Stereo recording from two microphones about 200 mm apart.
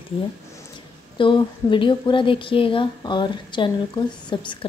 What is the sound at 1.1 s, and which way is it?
A woman's voice, 25° left (ahead or behind).